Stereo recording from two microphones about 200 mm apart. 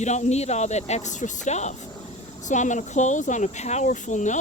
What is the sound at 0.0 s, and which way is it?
Speech, 35° left (ahead or behind).